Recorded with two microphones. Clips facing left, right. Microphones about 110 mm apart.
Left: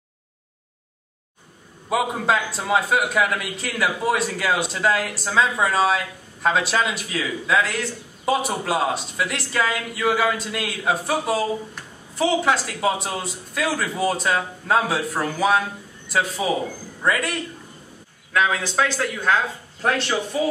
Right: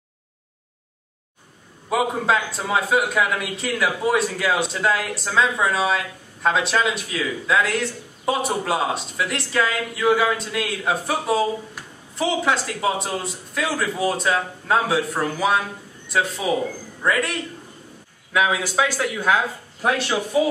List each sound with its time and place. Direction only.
1.9 s a man's voice: centre (ahead or behind)